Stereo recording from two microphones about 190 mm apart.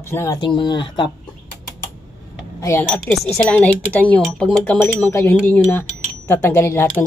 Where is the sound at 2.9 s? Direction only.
Centre (ahead or behind).